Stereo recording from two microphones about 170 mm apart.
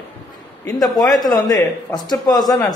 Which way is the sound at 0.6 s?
20° left (ahead or behind).